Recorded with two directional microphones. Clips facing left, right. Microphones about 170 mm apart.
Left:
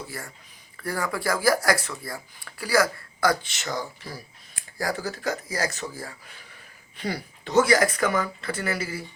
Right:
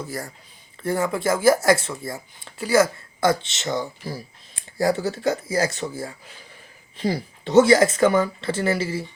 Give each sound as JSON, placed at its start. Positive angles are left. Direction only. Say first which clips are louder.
{"t": 0.1, "sound": "speech", "louder": "right 6 dB", "side_deg": -35}
{"t": 0.8, "sound": "speech", "louder": "right 6 dB", "side_deg": -25}